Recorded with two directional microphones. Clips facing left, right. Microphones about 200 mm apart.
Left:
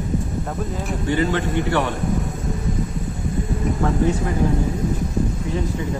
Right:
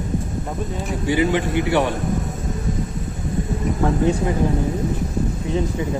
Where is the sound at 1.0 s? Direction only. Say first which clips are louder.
Right 2 dB; 15° right (ahead or behind).